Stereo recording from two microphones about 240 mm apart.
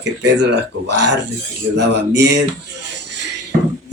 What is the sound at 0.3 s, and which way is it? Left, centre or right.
A man's voice, right.